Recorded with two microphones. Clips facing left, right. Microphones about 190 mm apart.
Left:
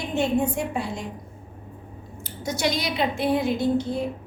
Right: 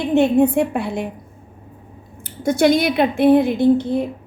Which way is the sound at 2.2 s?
55° right (ahead or behind).